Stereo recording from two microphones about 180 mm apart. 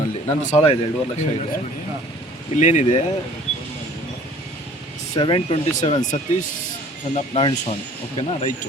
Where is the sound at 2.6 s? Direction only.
40° left (ahead or behind).